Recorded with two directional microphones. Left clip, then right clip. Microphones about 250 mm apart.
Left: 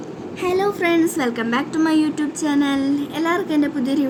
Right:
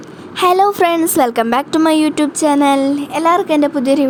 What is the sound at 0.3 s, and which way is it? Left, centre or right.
A woman's voice, right.